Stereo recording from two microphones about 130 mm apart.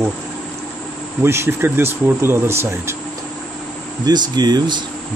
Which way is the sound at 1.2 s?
20° right (ahead or behind).